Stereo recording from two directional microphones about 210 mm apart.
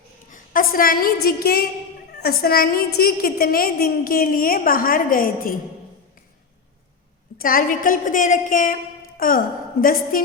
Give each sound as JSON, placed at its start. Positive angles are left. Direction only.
{"t": 0.3, "sound": "a woman's voice", "side_deg": 40}
{"t": 7.3, "sound": "a woman's voice", "side_deg": 40}